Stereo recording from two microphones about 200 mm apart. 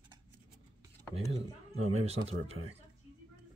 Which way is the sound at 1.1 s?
30° right (ahead or behind).